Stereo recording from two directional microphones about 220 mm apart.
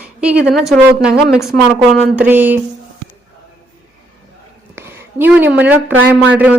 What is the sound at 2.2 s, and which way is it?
Speech, 10° right (ahead or behind).